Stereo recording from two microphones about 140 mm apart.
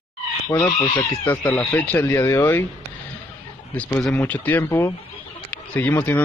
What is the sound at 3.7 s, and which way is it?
A man's voice, 15° left (ahead or behind).